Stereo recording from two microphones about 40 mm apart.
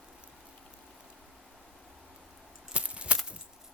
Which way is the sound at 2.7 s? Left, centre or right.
Right.